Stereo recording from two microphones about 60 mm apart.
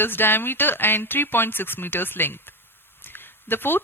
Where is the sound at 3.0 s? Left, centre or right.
Left.